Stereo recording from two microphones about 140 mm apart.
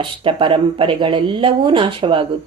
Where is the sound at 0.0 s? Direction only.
40° right (ahead or behind).